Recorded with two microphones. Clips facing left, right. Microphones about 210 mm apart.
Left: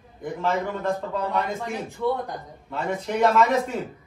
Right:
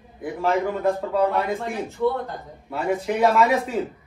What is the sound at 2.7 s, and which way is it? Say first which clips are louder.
Speech: right 3 dB; 10° right (ahead or behind).